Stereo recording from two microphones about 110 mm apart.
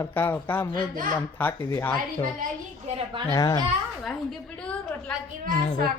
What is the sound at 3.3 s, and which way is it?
Speech, 35° left (ahead or behind).